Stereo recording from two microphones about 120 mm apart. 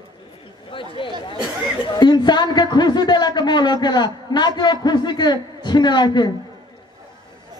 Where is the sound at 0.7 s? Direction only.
45° left (ahead or behind).